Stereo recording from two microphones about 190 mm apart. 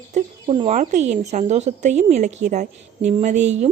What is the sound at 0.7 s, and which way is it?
A woman's voice, 40° right (ahead or behind).